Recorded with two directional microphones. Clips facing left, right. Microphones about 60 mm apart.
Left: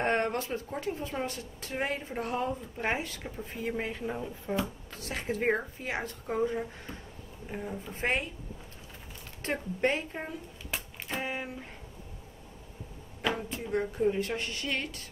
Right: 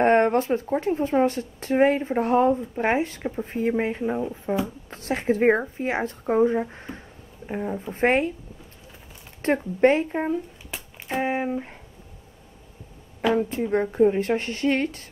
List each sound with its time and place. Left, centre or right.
0.0 s speech: right
3.4 s speech: right
4.8 s speech: right
9.4 s speech: right
13.5 s speech: right